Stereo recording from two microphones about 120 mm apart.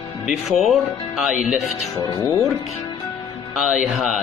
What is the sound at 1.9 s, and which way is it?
Speech, 30° left (ahead or behind).